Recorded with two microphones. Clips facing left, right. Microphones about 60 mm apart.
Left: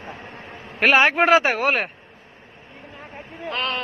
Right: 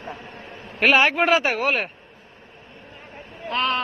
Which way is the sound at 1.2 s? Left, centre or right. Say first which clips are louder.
Left 3 dB; left.